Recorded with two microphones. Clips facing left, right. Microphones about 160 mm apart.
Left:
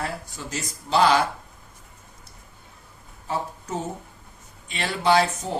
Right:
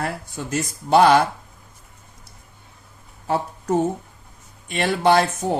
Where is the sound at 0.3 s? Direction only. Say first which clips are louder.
Right 7 dB; 55° right (ahead or behind).